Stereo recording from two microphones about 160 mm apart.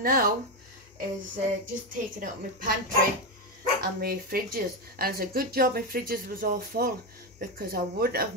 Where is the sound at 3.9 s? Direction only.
65° right (ahead or behind).